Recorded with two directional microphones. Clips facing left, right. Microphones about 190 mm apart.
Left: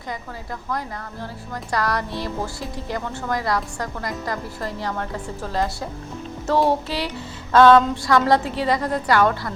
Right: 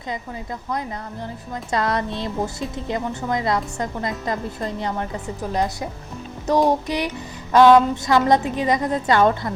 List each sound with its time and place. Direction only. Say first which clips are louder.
1.7 s a woman's voice: right 2 dB; 20° right (ahead or behind)
6.5 s music: right 1 dB; 15° right (ahead or behind)
7.5 s a woman's voice: right 1 dB; 15° right (ahead or behind)